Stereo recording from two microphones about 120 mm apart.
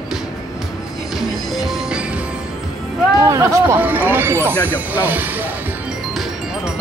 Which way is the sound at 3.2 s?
25° right (ahead or behind).